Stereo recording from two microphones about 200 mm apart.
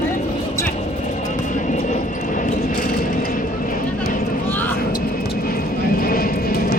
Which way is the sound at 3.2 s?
45° left (ahead or behind).